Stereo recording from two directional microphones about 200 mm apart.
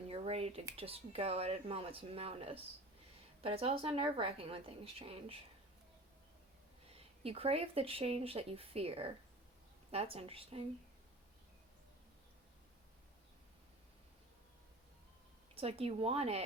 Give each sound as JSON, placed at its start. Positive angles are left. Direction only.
{"t": 0.1, "sound": "a sound", "side_deg": -30}
{"t": 0.8, "sound": "speech", "side_deg": -30}
{"t": 6.9, "sound": "speech", "side_deg": -30}
{"t": 15.5, "sound": "speech", "side_deg": -30}